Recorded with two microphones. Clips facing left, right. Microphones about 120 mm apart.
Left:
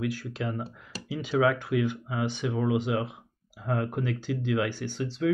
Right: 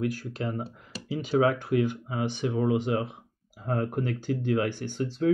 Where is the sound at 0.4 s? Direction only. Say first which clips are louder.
Right 1 dB; 30° right (ahead or behind).